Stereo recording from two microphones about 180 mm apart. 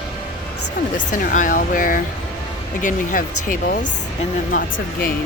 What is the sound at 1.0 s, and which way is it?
Speech, 45° left (ahead or behind).